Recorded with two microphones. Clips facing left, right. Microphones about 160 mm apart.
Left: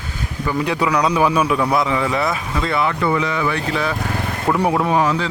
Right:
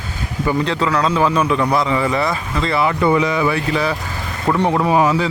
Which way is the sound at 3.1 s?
15° right (ahead or behind).